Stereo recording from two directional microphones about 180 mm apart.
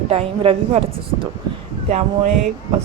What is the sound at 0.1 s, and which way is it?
Speech, 35° right (ahead or behind).